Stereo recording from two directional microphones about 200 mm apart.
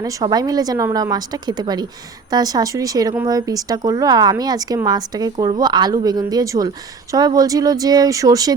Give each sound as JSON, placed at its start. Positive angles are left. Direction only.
{"t": 0.0, "sound": "speech", "side_deg": -15}